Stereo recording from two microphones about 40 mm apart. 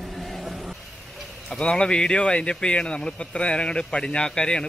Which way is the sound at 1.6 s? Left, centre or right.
Left.